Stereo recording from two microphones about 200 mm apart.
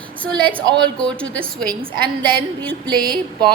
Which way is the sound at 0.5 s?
20° right (ahead or behind).